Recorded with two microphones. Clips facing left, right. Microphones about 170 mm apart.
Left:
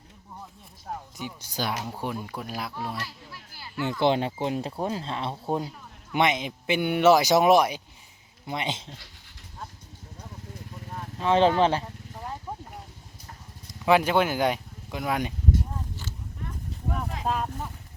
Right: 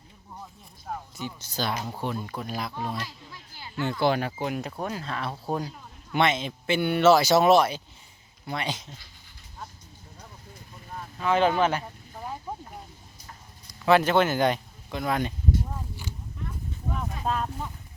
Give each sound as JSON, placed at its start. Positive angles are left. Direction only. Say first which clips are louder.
{"t": 1.1, "sound": "speech", "louder": "right 1 dB", "side_deg": 15}
{"t": 4.0, "sound": "speech", "louder": "left 2 dB", "side_deg": 25}
{"t": 11.2, "sound": "speech", "louder": "left 2 dB", "side_deg": 30}
{"t": 13.7, "sound": "speech", "louder": "right 1 dB", "side_deg": 10}
{"t": 17.2, "sound": "speech", "louder": "even", "side_deg": 5}